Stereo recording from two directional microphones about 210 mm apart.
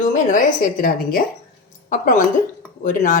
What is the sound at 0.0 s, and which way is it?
Speech, 35° left (ahead or behind).